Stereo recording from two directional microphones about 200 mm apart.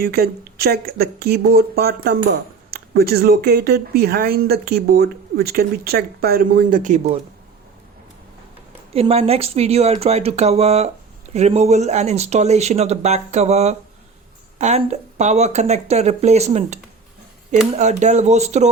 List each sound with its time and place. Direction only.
0.0 s speech: 50° right (ahead or behind)
8.9 s speech: 30° right (ahead or behind)